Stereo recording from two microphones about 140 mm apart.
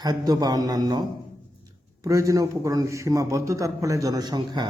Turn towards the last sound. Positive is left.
turn(degrees=-30)  # may be behind; listen again after turning